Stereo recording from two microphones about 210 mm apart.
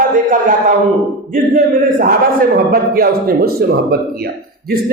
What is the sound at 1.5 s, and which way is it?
Speech, 40° right (ahead or behind).